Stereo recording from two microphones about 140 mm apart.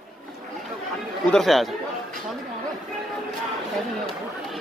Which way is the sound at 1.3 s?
Centre (ahead or behind).